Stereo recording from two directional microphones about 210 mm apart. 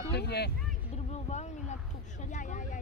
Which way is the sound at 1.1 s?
35° left (ahead or behind).